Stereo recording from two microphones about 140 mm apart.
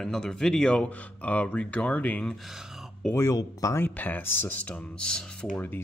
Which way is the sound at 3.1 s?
25° left (ahead or behind).